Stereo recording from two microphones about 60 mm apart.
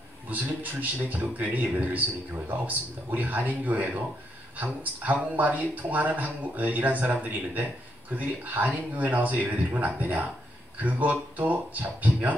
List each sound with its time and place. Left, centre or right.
0.3 s speech: right